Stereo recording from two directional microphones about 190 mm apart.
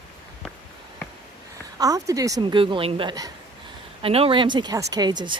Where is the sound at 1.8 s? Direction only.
20° right (ahead or behind).